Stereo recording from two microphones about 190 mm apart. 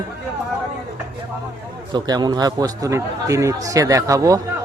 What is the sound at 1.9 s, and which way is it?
A man's voice, 20° right (ahead or behind).